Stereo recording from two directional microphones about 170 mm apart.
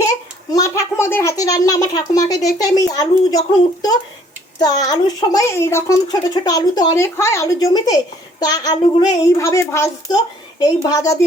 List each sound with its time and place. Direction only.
0.5 s speech: 20° left (ahead or behind)